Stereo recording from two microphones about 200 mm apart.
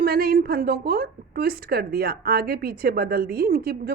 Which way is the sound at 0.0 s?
50° right (ahead or behind).